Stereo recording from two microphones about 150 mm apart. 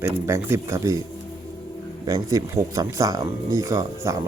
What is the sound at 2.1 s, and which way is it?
Speech, 25° right (ahead or behind).